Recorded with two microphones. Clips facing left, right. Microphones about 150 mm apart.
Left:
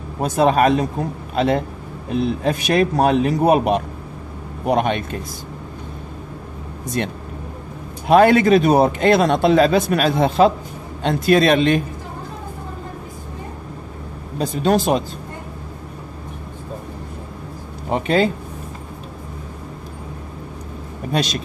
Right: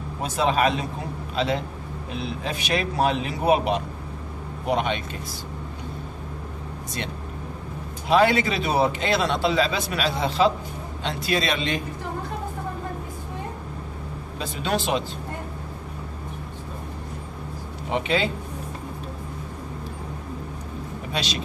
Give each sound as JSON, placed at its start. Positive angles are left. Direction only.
{"t": 0.2, "sound": "a man's voice", "side_deg": 50}
{"t": 7.0, "sound": "a man's voice", "side_deg": 55}
{"t": 14.4, "sound": "a man's voice", "side_deg": 45}
{"t": 17.8, "sound": "speech", "side_deg": 45}
{"t": 21.1, "sound": "speech", "side_deg": 45}